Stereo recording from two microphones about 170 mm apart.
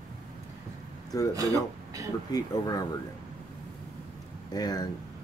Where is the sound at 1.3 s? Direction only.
20° right (ahead or behind).